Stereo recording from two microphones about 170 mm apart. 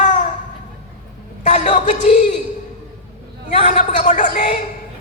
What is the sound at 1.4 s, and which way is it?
Speech, 45° left (ahead or behind).